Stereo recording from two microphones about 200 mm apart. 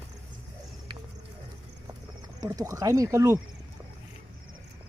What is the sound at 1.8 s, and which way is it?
Horse, 20° right (ahead or behind).